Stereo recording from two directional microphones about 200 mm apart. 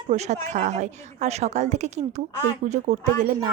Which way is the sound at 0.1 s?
35° right (ahead or behind).